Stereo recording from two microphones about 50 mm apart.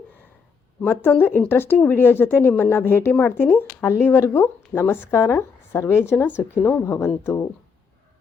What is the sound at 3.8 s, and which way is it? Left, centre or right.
A woman's voice, left.